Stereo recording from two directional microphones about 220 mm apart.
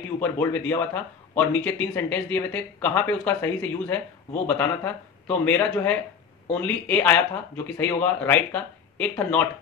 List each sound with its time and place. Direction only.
0.2 s speech: 10° left (ahead or behind)